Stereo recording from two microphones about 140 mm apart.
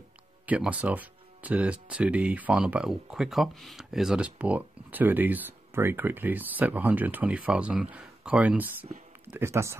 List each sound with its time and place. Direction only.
0.5 s speech: 10° right (ahead or behind)